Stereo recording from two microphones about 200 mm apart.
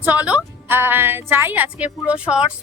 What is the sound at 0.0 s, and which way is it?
Speech, 10° right (ahead or behind).